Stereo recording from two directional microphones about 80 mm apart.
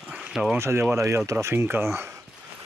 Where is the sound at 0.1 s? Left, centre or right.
Centre.